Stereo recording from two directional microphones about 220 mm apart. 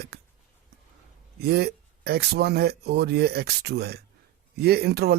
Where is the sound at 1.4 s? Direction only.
45° right (ahead or behind).